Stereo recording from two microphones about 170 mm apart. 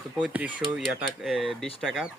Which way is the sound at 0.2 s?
10° right (ahead or behind).